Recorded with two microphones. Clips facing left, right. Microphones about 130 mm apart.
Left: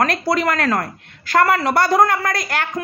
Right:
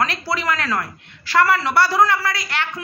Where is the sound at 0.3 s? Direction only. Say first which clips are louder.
Left 4 dB; 45° left (ahead or behind).